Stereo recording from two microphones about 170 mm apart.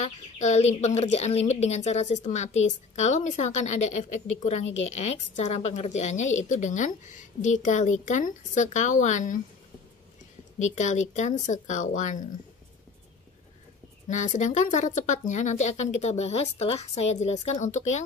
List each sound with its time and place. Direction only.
0.0 s a woman's voice: 40° left (ahead or behind)
10.6 s a woman's voice: 45° left (ahead or behind)
14.0 s a woman's voice: 45° left (ahead or behind)